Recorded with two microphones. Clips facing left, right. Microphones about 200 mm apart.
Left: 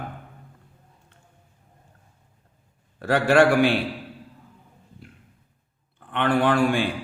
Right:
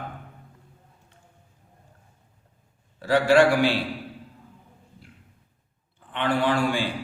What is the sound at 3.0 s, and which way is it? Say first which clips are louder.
Speech: even; 55° left (ahead or behind).